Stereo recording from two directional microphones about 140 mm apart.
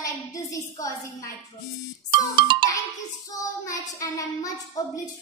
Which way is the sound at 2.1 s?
35° right (ahead or behind).